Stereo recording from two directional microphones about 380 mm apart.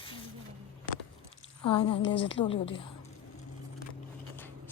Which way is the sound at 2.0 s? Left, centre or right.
Left.